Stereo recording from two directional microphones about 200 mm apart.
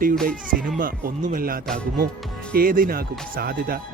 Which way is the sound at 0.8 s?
45° right (ahead or behind).